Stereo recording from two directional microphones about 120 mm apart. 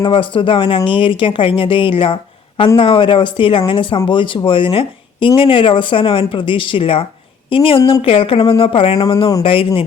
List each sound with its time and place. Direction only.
0.0 s speech: 45° left (ahead or behind)